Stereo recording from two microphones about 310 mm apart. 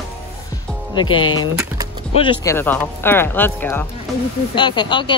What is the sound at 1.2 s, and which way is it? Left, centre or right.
Speech, centre.